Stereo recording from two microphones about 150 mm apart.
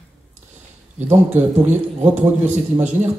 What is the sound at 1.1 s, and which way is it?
A man's voice, 50° right (ahead or behind).